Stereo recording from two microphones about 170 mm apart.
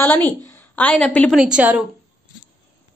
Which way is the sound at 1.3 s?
5° right (ahead or behind).